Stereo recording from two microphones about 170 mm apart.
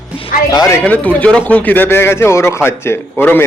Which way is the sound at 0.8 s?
10° left (ahead or behind).